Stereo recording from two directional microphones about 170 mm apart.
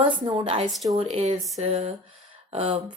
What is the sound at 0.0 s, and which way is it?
Speech, 30° right (ahead or behind).